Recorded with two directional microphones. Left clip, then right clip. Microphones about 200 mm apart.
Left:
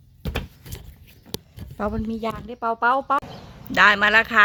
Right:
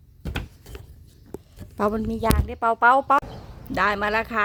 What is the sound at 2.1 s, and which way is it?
Speech, 15° right (ahead or behind).